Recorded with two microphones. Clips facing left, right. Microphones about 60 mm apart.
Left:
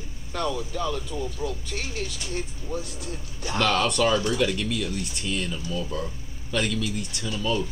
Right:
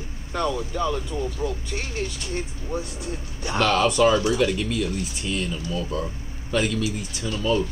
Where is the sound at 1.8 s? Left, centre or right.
Right.